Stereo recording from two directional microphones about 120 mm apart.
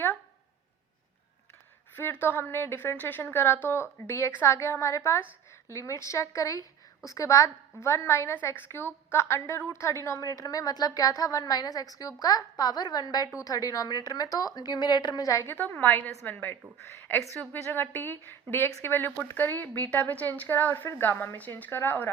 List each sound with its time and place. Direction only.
2.0 s a woman's voice: 15° left (ahead or behind)
15.5 s a woman's voice: 15° left (ahead or behind)